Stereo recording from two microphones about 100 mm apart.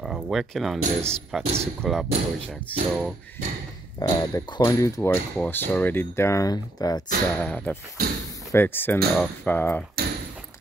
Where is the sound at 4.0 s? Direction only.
35° left (ahead or behind).